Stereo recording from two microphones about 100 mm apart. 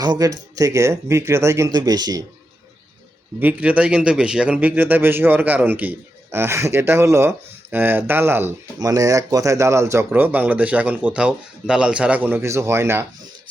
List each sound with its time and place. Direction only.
0.0 s speech: 40° right (ahead or behind)
1.7 s speech: 40° right (ahead or behind)
3.4 s a man's voice: 15° right (ahead or behind)
8.8 s speech: 35° right (ahead or behind); by 12.4 s 15° right (ahead or behind)
12.4 s a man's voice: 30° right (ahead or behind)